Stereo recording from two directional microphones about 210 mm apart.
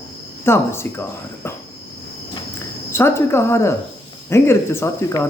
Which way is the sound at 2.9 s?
10° left (ahead or behind).